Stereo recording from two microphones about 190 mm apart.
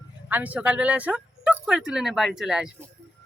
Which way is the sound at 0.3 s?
10° right (ahead or behind).